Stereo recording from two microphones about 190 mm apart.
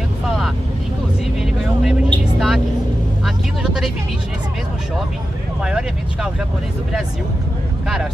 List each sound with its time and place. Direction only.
1.4 s vehicle: centre (ahead or behind)
5.6 s vehicle: 5° right (ahead or behind)